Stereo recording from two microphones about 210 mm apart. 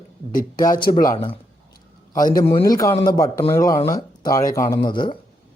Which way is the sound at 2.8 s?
15° left (ahead or behind).